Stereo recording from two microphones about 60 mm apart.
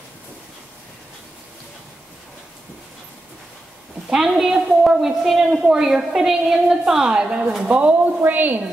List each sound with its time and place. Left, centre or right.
4.1 s a woman's voice: centre
7.6 s a woman's voice: right